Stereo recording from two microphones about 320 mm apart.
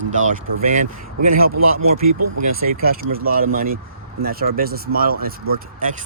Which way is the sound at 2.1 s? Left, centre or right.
Right.